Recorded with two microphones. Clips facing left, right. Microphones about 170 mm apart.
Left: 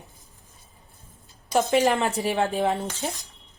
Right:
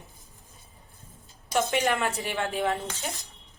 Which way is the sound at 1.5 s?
35° left (ahead or behind).